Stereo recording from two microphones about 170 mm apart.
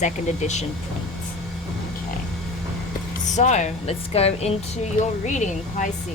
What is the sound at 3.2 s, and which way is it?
A woman's voice, 45° left (ahead or behind).